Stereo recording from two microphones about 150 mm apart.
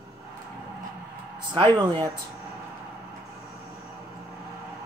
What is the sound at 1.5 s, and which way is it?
Speech, 30° right (ahead or behind).